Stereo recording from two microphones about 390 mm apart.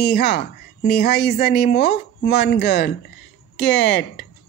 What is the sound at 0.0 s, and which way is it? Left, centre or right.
Speech, left.